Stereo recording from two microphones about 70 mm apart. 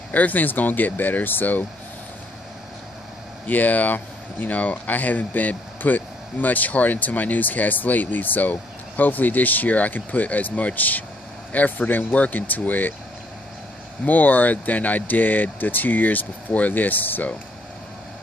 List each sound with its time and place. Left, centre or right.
0.1 s speech: left
3.4 s speech: left
14.0 s speech: left